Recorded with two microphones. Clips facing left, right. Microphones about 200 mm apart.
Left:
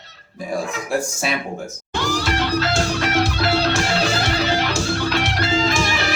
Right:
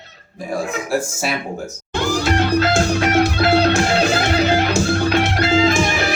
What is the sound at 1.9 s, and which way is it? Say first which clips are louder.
Music: right 4 dB; 50° right (ahead or behind).